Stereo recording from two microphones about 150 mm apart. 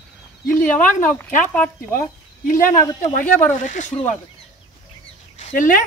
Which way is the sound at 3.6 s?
55° left (ahead or behind).